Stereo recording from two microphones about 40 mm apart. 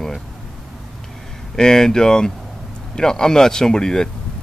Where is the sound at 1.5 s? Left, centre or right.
Centre.